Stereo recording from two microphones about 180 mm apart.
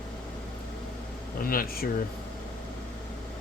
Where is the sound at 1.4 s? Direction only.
55° left (ahead or behind).